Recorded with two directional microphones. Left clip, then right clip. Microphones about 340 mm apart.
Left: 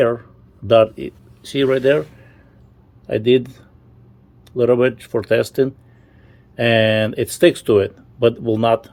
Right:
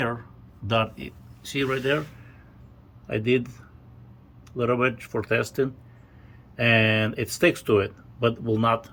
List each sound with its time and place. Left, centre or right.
0.0 s speech: centre
3.1 s speech: left
4.5 s speech: left
6.6 s speech: left